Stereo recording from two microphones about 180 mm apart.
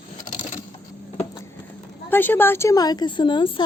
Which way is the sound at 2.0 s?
10° left (ahead or behind).